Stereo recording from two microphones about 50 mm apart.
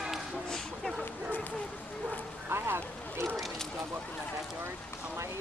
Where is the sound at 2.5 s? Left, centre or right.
Right.